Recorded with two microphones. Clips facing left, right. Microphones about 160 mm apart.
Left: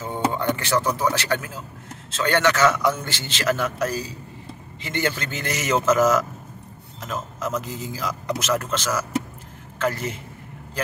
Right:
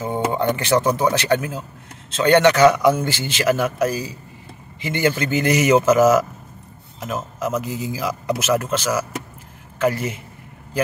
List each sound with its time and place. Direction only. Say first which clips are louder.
0.0 s a man's voice: right 3 dB; 15° right (ahead or behind)